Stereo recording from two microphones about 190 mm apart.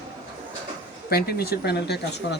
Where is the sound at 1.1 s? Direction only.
55° left (ahead or behind).